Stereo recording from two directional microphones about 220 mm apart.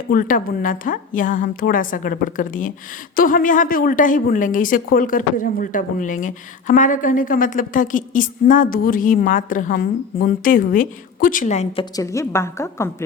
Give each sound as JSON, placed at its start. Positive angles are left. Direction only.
{"t": 0.1, "sound": "a woman's voice", "side_deg": 40}
{"t": 11.9, "sound": "a woman's voice", "side_deg": 15}